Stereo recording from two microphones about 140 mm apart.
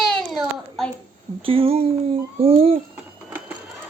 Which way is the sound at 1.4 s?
40° right (ahead or behind).